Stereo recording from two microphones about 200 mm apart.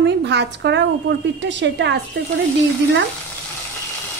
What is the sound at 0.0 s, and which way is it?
A woman's voice, 60° right (ahead or behind).